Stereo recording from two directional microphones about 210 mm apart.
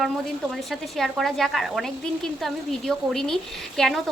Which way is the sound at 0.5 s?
Centre (ahead or behind).